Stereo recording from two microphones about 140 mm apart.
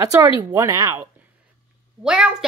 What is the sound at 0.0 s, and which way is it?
Speech, 25° right (ahead or behind).